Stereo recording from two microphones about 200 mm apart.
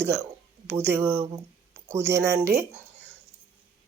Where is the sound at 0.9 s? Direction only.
15° right (ahead or behind).